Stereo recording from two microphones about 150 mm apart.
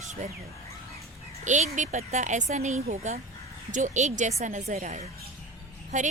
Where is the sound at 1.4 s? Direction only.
55° right (ahead or behind).